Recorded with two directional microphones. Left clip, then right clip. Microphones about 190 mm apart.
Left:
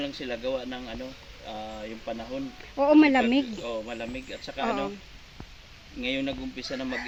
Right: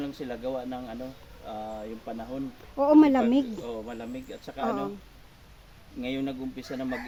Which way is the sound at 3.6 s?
65° right (ahead or behind).